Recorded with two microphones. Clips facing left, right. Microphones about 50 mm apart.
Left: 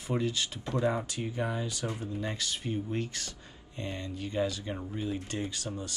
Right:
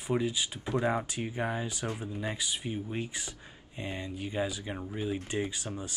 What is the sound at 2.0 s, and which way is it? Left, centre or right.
Speech, centre.